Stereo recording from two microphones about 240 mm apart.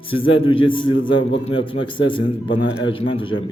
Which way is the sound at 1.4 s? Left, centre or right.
Left.